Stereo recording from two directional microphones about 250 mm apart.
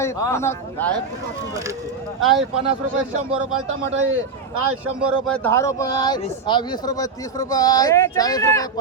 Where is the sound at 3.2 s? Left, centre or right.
Right.